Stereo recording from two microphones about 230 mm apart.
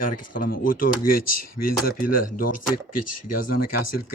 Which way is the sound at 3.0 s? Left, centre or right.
Left.